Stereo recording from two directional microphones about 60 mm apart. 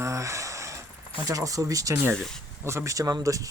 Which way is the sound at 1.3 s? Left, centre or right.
Right.